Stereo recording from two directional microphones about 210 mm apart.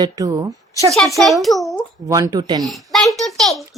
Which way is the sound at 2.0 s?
15° right (ahead or behind).